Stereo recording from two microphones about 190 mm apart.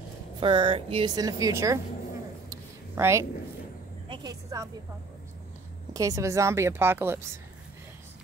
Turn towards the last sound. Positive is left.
turn(degrees=-15)  # may be behind; listen again after turning